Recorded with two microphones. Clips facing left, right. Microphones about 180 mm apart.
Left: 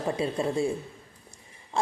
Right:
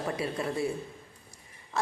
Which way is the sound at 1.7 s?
30° left (ahead or behind).